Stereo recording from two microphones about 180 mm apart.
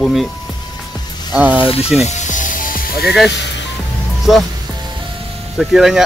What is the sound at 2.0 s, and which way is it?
Music, 40° left (ahead or behind).